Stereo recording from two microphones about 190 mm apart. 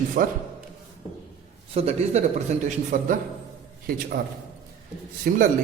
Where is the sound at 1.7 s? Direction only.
30° right (ahead or behind).